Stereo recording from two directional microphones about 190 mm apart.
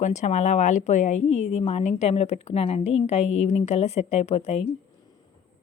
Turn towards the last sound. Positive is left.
turn(degrees=35)  # may be behind; listen again after turning